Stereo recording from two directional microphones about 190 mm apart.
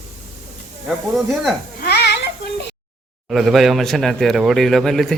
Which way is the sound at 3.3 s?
Centre (ahead or behind).